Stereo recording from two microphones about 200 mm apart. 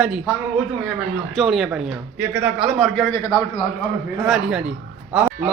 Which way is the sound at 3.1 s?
20° left (ahead or behind).